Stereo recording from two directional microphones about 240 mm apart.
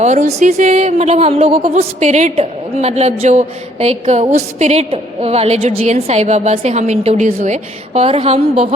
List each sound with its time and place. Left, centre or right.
0.0 s speech: right